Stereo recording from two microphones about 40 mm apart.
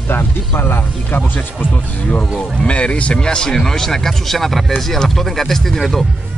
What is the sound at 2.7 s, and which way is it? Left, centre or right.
Speech, left.